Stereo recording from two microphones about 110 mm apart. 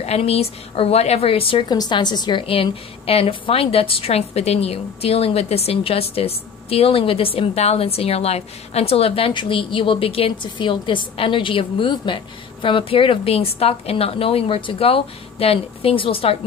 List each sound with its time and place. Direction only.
0.0 s a woman's voice: 70° left (ahead or behind)
1.7 s a woman's voice: 40° left (ahead or behind)
2.4 s a woman's voice: 55° left (ahead or behind)